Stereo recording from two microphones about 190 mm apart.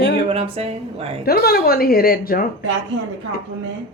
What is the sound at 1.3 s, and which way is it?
Speech, 55° left (ahead or behind).